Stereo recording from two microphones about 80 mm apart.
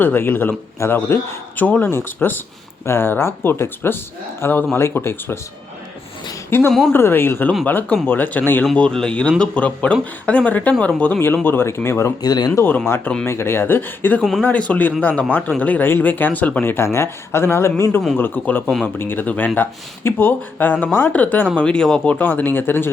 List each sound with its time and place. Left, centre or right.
0.0 s speech: left
6.5 s speech: left
8.7 s speech: centre
11.4 s speech: left
12.2 s speech: left
12.6 s speech: left
14.2 s speech: centre
14.4 s speech: centre
18.6 s speech: centre
18.9 s speech: left; by 22.1 s centre
22.1 s speech: left